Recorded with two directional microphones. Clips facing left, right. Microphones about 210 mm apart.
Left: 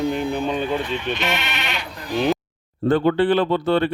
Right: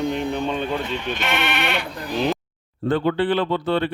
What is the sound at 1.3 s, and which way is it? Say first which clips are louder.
Speech: right 3 dB; 55° right (ahead or behind).